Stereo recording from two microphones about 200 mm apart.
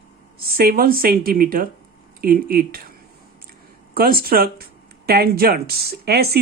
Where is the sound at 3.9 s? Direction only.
50° right (ahead or behind).